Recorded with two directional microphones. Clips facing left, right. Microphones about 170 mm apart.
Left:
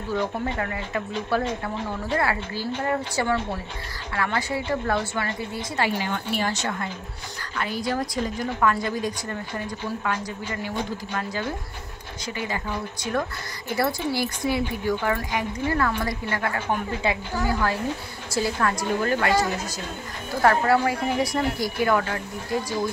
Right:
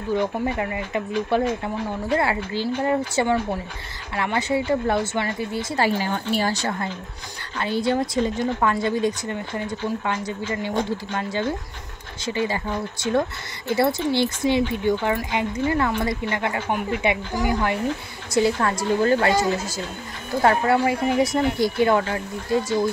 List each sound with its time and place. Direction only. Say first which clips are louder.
0.1 s a woman's voice: right 4 dB; 20° right (ahead or behind)